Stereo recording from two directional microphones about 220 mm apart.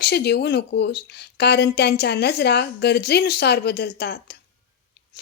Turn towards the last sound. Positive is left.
turn(degrees=50)  # may be behind; listen again after turning